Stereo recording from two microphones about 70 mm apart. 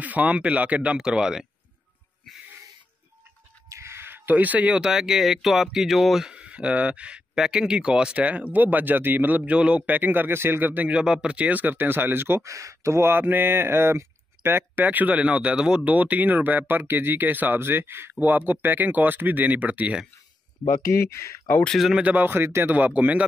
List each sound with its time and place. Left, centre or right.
0.0 s speech: right
0.9 s speech: centre
3.6 s speech: right
11.0 s speech: centre; by 12.4 s right
12.4 s speech: right
20.9 s speech: left
21.7 s speech: centre
22.0 s speech: right
22.7 s speech: right